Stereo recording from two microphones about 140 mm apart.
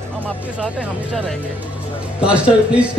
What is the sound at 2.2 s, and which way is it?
Speech, 10° right (ahead or behind).